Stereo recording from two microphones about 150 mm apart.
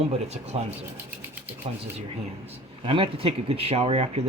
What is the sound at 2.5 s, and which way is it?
Speech, 35° right (ahead or behind).